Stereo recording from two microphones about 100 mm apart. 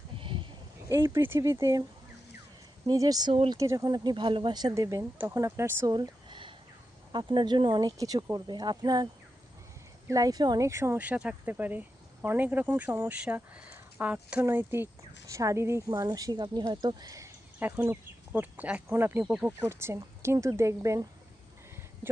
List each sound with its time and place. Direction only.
0.2 s a sound: 65° right (ahead or behind)
0.9 s speech: 30° right (ahead or behind)
2.8 s speech: 40° right (ahead or behind)
4.7 s speech: 35° right (ahead or behind)
5.8 s a sound: 40° right (ahead or behind)
7.1 s speech: 50° right (ahead or behind)
7.8 s speech: 40° right (ahead or behind)
10.1 s speech: 35° right (ahead or behind)
10.7 s speech: 30° right (ahead or behind)
10.9 s speech: 15° right (ahead or behind)
14.4 s speech: 25° right (ahead or behind)
17.6 s speech: 15° right (ahead or behind)
19.2 s speech: 10° right (ahead or behind); by 21.1 s 30° right (ahead or behind)